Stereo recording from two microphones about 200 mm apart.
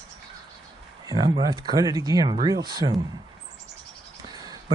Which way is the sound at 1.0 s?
20° right (ahead or behind).